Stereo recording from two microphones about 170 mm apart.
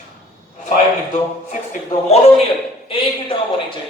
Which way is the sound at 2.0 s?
40° left (ahead or behind).